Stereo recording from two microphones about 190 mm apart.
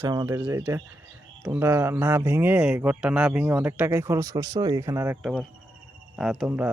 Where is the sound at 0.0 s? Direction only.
15° right (ahead or behind).